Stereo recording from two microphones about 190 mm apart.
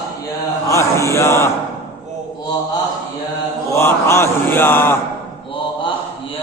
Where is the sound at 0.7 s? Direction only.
15° left (ahead or behind).